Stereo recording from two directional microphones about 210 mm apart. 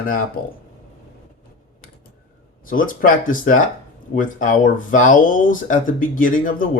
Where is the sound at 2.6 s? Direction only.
40° left (ahead or behind).